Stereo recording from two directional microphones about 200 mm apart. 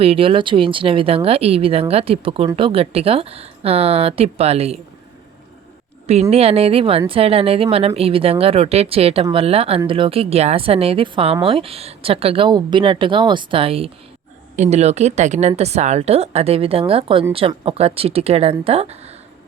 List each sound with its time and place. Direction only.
0.0 s speech: 30° right (ahead or behind)
6.3 s a woman's voice: 30° right (ahead or behind)